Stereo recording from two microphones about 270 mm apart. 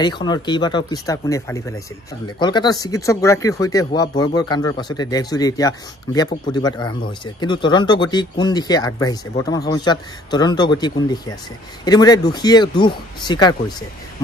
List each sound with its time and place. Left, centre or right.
0.0 s speech: centre